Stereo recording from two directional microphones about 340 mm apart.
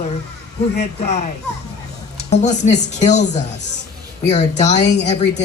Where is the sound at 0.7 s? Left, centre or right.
Centre.